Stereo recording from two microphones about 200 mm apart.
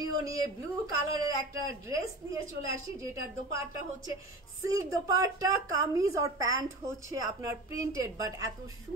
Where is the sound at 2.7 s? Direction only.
15° right (ahead or behind).